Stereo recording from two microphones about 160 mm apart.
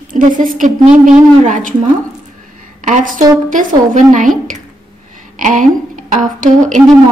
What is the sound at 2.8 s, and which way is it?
A woman's voice, 55° right (ahead or behind).